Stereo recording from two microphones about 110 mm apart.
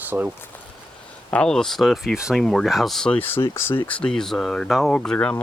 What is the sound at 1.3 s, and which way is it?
Speech, 10° left (ahead or behind).